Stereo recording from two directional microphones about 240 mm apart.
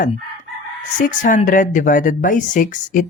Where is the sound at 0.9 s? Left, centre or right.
Left.